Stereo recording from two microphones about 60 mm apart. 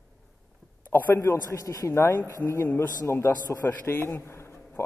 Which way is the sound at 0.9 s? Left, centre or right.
Left.